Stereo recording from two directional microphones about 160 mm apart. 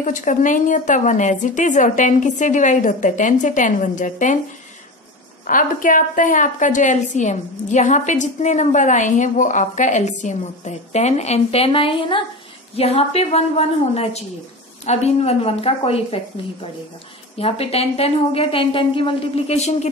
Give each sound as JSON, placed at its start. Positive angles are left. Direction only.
{"t": 0.0, "sound": "a woman's voice", "side_deg": 55}
{"t": 5.5, "sound": "a woman's voice", "side_deg": 55}
{"t": 17.4, "sound": "speech", "side_deg": 40}